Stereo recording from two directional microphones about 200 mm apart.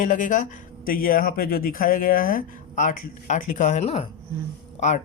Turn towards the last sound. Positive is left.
turn(degrees=35)  # may be behind; listen again after turning